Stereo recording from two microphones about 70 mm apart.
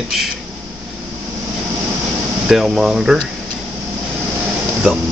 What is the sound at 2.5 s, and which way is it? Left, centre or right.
Speech, centre.